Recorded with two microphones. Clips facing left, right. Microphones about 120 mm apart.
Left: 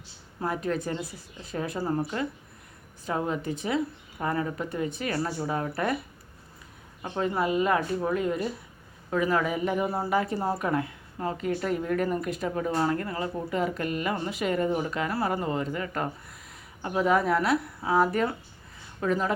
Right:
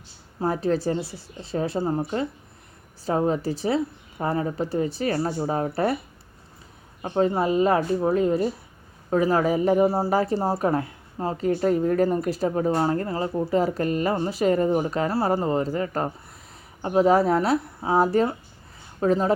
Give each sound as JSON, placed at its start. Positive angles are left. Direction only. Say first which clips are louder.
{"t": 0.3, "sound": "speech", "louder": "right 6 dB", "side_deg": -30}
{"t": 7.0, "sound": "speech", "louder": "right 5 dB", "side_deg": -35}